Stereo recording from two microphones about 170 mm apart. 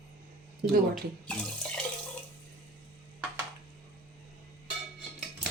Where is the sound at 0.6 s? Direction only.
60° right (ahead or behind).